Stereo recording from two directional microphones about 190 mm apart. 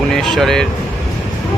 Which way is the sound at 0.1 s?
Centre (ahead or behind).